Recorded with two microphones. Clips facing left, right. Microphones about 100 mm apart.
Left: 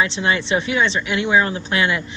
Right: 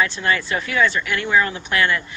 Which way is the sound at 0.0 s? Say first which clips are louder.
Left 1 dB; 20° left (ahead or behind).